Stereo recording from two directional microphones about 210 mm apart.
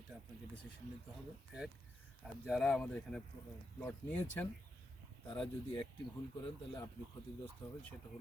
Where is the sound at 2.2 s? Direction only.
Centre (ahead or behind).